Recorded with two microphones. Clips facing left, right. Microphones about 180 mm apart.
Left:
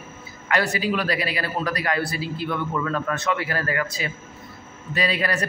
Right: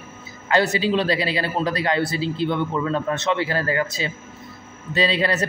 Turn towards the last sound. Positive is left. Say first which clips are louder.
# right 3 dB
turn(degrees=-25)  # may be behind; listen again after turning